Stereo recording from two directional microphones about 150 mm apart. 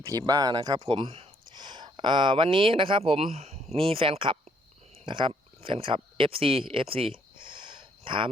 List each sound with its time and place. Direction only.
0.0 s speech: 25° right (ahead or behind)